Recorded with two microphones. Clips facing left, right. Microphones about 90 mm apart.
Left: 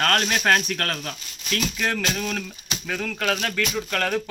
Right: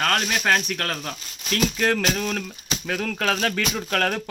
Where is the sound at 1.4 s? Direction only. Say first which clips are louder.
Right 4 dB; 35° right (ahead or behind).